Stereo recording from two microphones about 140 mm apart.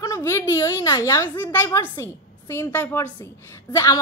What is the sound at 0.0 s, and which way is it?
A woman's voice, 20° left (ahead or behind).